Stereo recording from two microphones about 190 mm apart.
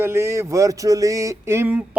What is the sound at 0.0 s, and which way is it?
Speech, 15° right (ahead or behind).